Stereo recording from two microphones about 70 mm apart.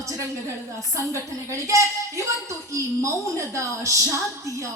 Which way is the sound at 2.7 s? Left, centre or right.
Right.